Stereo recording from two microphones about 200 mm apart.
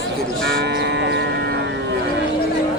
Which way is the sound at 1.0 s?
60° right (ahead or behind).